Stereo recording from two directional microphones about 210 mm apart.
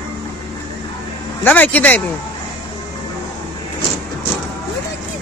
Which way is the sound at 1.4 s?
5° left (ahead or behind).